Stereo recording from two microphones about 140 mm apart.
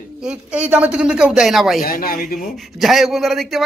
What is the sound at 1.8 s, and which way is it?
Speech, 90° left.